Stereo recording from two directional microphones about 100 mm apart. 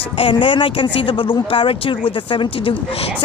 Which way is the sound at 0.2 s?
55° left (ahead or behind).